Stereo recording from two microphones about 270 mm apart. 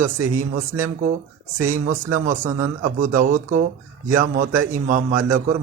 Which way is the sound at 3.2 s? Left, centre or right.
Right.